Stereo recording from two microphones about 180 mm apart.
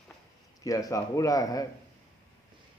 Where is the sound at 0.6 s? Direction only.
20° left (ahead or behind).